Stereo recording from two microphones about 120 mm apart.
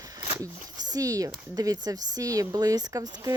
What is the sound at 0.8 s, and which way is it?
Speech, 30° right (ahead or behind).